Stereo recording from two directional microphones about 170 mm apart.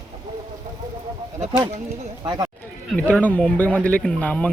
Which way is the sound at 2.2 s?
20° right (ahead or behind).